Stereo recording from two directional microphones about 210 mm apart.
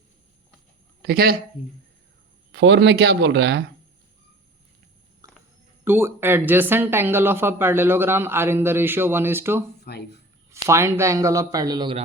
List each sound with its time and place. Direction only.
1.0 s speech: 45° right (ahead or behind)
2.5 s speech: 60° right (ahead or behind)
5.2 s a sound: 15° right (ahead or behind)
5.8 s speech: 10° right (ahead or behind)
9.8 s speech: 50° left (ahead or behind)
10.5 s speech: 15° right (ahead or behind)